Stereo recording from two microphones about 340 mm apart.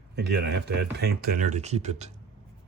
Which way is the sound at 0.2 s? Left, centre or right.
Right.